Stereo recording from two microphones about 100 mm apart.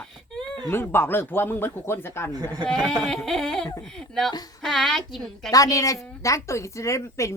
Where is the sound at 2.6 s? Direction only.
5° left (ahead or behind).